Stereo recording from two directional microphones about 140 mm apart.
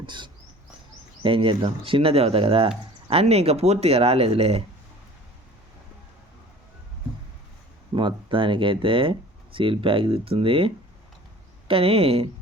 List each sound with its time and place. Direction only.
0.0 s dog: 35° right (ahead or behind)
1.2 s speech: 40° right (ahead or behind)
7.9 s speech: 35° right (ahead or behind)
11.7 s speech: 45° right (ahead or behind)